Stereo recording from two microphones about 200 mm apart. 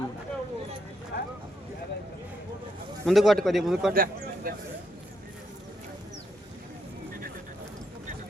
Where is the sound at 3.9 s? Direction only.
45° right (ahead or behind).